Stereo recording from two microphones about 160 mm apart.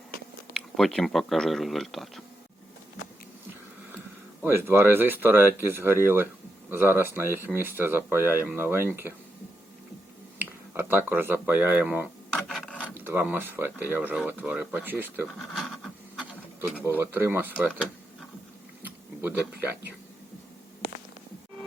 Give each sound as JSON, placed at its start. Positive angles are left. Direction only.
{"t": 0.5, "sound": "speech", "side_deg": 0}
{"t": 4.4, "sound": "speech", "side_deg": -15}
{"t": 10.3, "sound": "speech", "side_deg": -15}
{"t": 12.3, "sound": "mechanisms", "side_deg": 0}
{"t": 12.9, "sound": "speech", "side_deg": -15}
{"t": 15.4, "sound": "a sound", "side_deg": 0}
{"t": 17.0, "sound": "speech", "side_deg": -15}
{"t": 19.2, "sound": "speech", "side_deg": -15}